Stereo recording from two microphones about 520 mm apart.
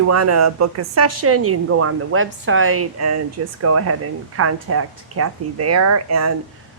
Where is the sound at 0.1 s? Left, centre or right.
Right.